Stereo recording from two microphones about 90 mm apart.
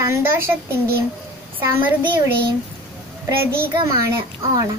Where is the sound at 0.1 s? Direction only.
30° right (ahead or behind).